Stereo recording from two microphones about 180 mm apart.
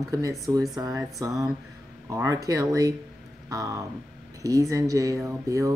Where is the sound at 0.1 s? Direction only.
20° right (ahead or behind).